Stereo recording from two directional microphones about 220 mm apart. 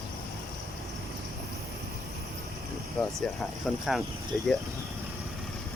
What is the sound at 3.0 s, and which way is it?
Speech, 5° left (ahead or behind).